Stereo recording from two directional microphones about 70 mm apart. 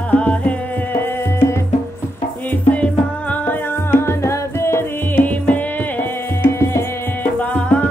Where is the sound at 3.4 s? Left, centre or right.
Left.